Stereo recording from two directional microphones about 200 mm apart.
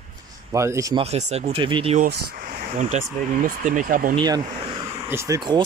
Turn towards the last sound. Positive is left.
turn(degrees=-20)  # may be behind; listen again after turning